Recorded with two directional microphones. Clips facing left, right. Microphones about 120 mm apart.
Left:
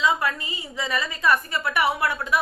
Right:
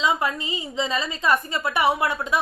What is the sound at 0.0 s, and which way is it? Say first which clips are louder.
A woman's voice: even; 20° right (ahead or behind).